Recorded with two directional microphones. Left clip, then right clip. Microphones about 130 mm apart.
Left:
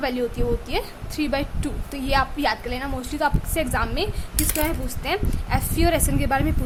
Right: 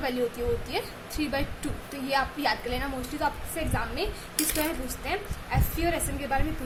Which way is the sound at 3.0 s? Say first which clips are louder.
Left 6 dB; 45° left (ahead or behind).